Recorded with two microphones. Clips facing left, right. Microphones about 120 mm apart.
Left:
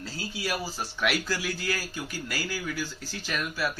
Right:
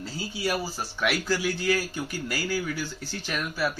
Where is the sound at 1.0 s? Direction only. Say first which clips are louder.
Right 1 dB; centre (ahead or behind).